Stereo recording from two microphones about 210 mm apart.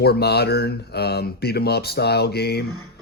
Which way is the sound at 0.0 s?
50° left (ahead or behind).